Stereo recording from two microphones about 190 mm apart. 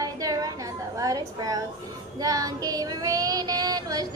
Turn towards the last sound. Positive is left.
turn(degrees=-20)  # may be behind; listen again after turning